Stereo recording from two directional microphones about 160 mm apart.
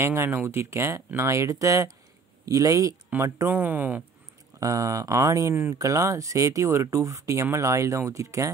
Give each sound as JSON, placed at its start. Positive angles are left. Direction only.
{"t": 0.0, "sound": "speech", "side_deg": -15}